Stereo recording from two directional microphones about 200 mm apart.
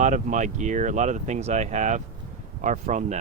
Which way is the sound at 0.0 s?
40° right (ahead or behind).